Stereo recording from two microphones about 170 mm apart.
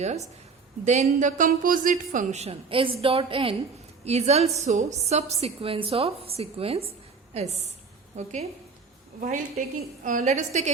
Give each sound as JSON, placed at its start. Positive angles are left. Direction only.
{"t": 0.0, "sound": "a woman's voice", "side_deg": -40}